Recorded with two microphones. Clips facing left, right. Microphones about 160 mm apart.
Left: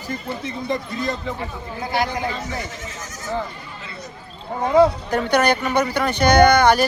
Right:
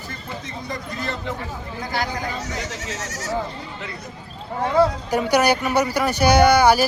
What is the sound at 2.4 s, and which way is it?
Speech, 80° right.